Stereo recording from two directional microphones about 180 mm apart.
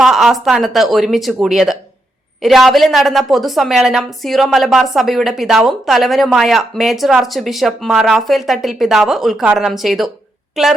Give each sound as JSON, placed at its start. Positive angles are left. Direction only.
{"t": 0.0, "sound": "a woman's voice", "side_deg": 0}